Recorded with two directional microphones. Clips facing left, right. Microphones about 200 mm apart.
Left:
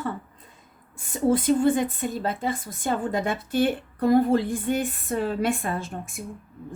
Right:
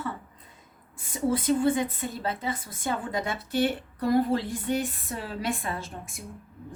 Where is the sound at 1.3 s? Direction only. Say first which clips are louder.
Left 4 dB; 45° left (ahead or behind).